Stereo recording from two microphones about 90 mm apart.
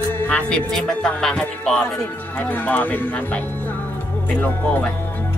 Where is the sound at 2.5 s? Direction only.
20° left (ahead or behind).